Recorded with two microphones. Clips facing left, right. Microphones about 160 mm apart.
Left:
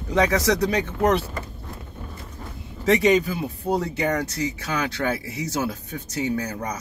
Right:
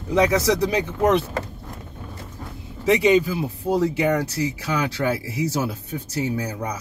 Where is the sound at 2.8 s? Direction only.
5° right (ahead or behind).